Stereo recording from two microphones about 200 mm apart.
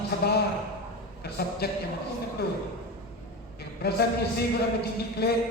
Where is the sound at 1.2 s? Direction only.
50° left (ahead or behind).